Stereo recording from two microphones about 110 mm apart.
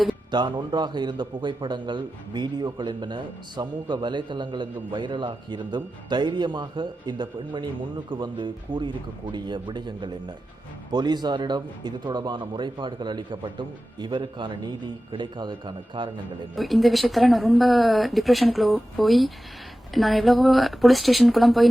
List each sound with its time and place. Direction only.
0.3 s a man's voice: 45° right (ahead or behind)
16.6 s speech: centre (ahead or behind)